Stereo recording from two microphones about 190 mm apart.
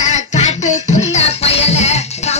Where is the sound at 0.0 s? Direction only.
35° left (ahead or behind).